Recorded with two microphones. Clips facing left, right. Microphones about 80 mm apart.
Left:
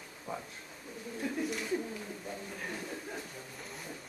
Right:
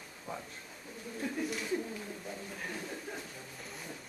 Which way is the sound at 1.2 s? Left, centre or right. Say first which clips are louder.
Left 1 dB; centre.